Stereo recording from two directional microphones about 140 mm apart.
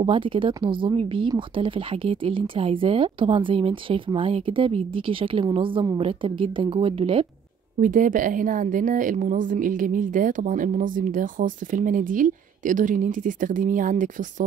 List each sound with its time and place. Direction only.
0.0 s speech: 40° right (ahead or behind)
7.8 s a woman's voice: 70° right (ahead or behind)